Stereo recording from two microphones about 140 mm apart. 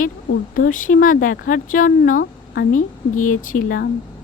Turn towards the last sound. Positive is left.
turn(degrees=80)